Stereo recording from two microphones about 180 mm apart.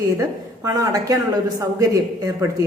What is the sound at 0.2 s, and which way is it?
A woman's voice, 20° right (ahead or behind).